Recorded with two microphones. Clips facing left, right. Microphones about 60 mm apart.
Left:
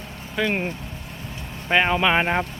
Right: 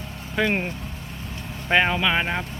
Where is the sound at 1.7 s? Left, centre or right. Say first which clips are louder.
Even; centre.